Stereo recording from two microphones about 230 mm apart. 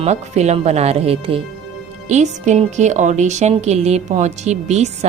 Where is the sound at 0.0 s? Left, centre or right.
Right.